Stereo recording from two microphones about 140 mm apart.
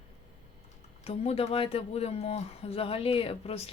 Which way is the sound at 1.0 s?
45° left (ahead or behind).